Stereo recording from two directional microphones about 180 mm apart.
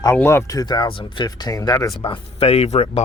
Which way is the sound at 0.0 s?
15° left (ahead or behind).